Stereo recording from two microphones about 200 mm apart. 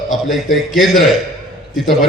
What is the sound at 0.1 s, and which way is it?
A man's voice, centre (ahead or behind).